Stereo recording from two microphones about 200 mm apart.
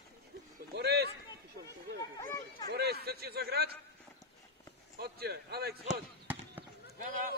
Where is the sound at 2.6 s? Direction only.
55° right (ahead or behind).